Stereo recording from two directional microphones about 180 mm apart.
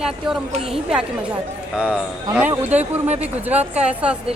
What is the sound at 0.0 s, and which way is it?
Speech, centre (ahead or behind).